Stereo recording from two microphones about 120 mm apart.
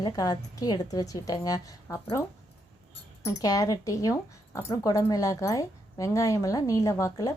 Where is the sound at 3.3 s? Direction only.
30° left (ahead or behind).